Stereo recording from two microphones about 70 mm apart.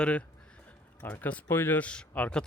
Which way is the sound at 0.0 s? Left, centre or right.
Centre.